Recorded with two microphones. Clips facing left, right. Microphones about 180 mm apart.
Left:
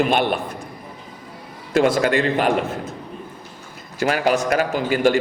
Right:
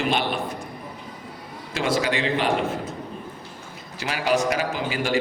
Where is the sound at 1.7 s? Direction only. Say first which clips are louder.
Left 7 dB; 50° left (ahead or behind).